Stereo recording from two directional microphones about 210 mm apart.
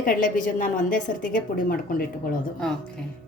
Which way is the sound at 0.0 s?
40° left (ahead or behind).